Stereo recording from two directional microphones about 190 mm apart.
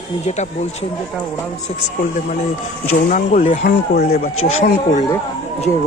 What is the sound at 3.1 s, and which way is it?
Speech, 45° left (ahead or behind).